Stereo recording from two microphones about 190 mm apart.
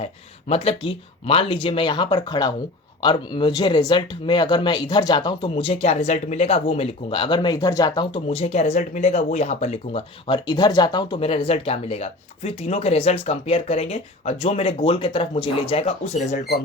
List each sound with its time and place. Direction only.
0.0 s speech: 30° left (ahead or behind)